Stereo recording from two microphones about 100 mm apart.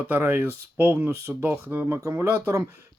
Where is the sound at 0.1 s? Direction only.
20° right (ahead or behind).